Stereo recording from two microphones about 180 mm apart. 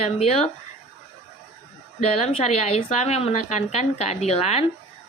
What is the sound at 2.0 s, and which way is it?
A woman's voice, 35° left (ahead or behind).